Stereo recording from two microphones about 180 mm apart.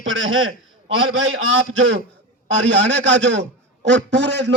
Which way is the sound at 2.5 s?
85° right.